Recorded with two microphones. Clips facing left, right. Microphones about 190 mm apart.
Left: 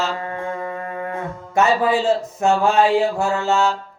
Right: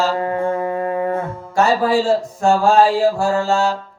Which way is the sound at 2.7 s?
40° right (ahead or behind).